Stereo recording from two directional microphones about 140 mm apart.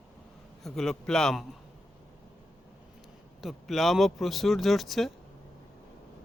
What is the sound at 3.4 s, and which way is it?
Speech, centre (ahead or behind).